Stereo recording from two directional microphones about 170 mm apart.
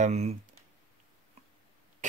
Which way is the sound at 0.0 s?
40° right (ahead or behind).